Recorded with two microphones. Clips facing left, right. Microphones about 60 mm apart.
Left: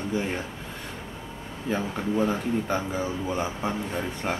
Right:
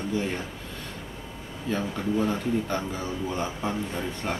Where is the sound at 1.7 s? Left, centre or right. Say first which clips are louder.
Even; centre.